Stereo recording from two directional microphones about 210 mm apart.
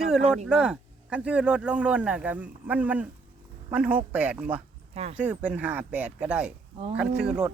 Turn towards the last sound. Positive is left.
turn(degrees=-5)  # may be behind; listen again after turning